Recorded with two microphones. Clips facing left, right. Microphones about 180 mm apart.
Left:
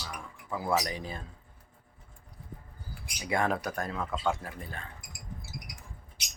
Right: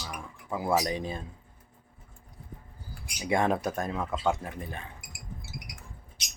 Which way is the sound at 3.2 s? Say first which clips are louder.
Right 3 dB; 25° right (ahead or behind).